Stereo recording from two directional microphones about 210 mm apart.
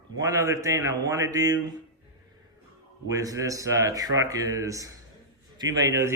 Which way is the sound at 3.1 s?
15° right (ahead or behind).